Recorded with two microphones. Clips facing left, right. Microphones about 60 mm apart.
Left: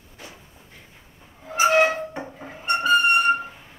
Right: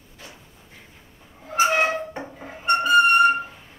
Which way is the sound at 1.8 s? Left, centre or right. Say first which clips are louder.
Left 1 dB; centre.